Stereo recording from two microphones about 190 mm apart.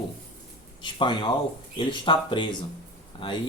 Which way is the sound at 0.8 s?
25° left (ahead or behind).